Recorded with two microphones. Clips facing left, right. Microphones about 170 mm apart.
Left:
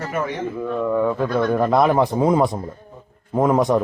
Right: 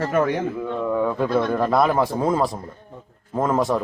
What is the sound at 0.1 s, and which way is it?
Speech, 60° right (ahead or behind).